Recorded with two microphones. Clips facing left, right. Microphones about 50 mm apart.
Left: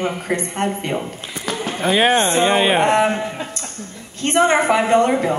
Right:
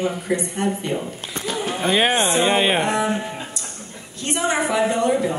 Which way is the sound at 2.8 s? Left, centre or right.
Left.